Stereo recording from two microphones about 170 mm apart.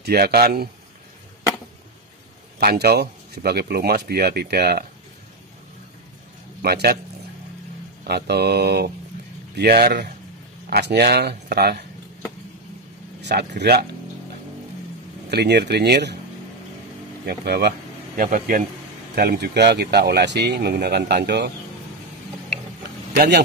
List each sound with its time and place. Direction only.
0.0 s speech: 65° right (ahead or behind)
2.6 s speech: 70° right (ahead or behind)
6.6 s speech: 65° right (ahead or behind)
8.0 s speech: 75° right (ahead or behind)
13.2 s speech: 85° right
15.2 s speech: 80° right
17.3 s speech: 65° right (ahead or behind)
23.1 s speech: 75° right (ahead or behind)